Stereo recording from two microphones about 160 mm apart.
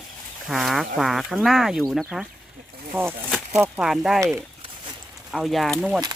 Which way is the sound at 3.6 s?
5° right (ahead or behind).